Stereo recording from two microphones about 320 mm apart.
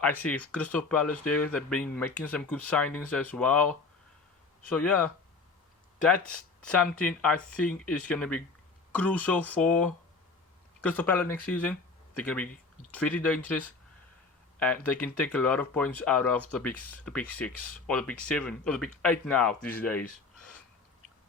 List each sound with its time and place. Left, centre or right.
0.0 s speech: centre
6.1 s speech: left
6.7 s speech: centre
14.8 s speech: centre